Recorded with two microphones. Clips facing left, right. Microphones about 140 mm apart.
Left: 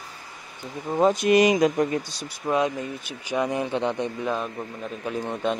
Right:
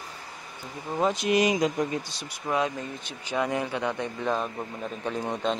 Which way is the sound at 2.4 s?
20° left (ahead or behind).